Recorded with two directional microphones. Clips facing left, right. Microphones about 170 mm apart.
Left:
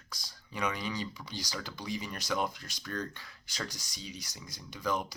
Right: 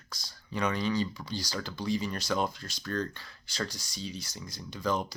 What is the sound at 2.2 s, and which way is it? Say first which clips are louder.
Speech: right 1 dB; 30° right (ahead or behind).